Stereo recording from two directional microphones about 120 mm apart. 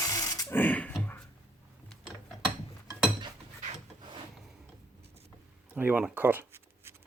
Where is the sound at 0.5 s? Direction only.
15° left (ahead or behind).